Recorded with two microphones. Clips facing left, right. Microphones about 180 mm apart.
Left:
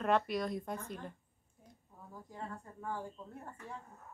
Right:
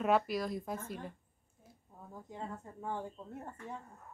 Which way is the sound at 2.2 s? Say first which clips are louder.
Right 2 dB; 20° right (ahead or behind).